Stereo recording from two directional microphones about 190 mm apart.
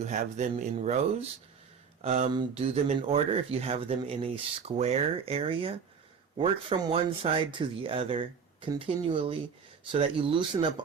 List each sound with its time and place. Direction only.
0.0 s speech: 40° right (ahead or behind)